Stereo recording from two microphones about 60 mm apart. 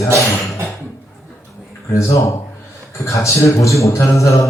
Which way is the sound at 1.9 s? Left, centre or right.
Left.